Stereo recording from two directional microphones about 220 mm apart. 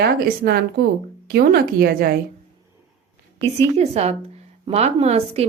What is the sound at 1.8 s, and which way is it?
Speech, 40° right (ahead or behind).